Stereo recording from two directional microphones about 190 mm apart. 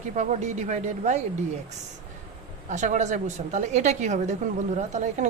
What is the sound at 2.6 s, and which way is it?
A woman's voice, 40° right (ahead or behind).